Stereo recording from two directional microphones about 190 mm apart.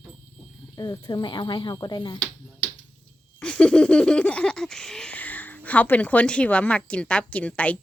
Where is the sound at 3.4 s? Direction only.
5° left (ahead or behind).